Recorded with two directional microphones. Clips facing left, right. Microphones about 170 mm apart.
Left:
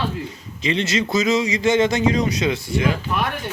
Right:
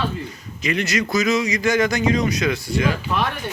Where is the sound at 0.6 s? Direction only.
25° left (ahead or behind).